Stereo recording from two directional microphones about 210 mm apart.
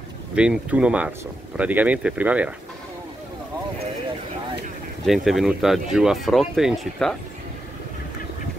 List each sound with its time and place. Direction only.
0.4 s speech: 5° right (ahead or behind)
5.0 s speech: centre (ahead or behind)